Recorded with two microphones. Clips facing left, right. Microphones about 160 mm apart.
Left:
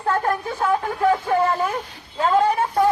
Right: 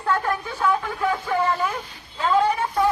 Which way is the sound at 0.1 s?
50° left (ahead or behind).